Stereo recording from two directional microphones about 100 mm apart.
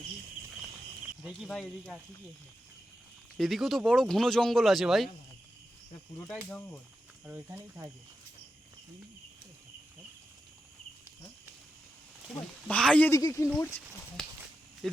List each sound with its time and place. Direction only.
3.3 s speech: centre (ahead or behind)
7.3 s speech: 25° right (ahead or behind)
12.6 s speech: 10° left (ahead or behind)
13.1 s speech: 30° left (ahead or behind)